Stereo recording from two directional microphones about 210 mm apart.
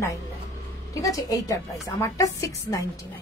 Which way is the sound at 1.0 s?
15° left (ahead or behind).